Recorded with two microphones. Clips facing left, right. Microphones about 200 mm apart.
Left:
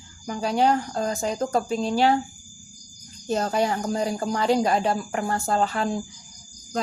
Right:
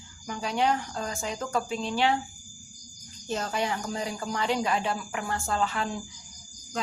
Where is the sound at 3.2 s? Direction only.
40° left (ahead or behind).